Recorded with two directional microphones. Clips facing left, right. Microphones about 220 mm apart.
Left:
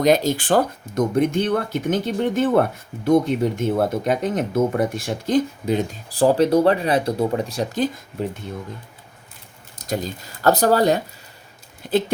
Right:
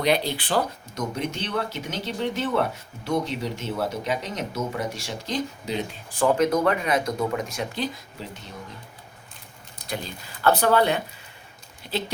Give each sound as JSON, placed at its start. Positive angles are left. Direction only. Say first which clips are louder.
{"t": 0.0, "sound": "speech", "louder": "left 6 dB", "side_deg": 45}
{"t": 9.7, "sound": "speech", "louder": "left 7 dB", "side_deg": 45}
{"t": 11.9, "sound": "speech", "louder": "left 9 dB", "side_deg": 50}